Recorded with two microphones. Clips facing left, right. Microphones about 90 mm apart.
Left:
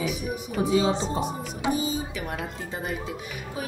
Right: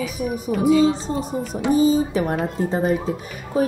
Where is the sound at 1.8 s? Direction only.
40° right (ahead or behind).